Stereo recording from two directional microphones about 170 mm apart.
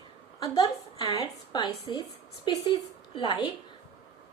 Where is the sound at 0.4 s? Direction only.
20° left (ahead or behind).